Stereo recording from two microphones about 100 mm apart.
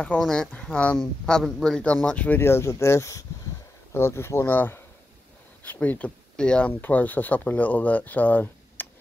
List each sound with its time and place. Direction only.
0.0 s speech: 10° left (ahead or behind)